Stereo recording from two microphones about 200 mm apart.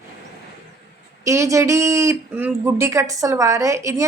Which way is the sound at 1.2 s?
15° right (ahead or behind).